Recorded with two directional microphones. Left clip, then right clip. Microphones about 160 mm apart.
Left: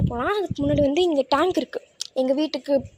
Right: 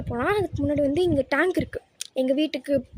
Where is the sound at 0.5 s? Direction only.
5° left (ahead or behind).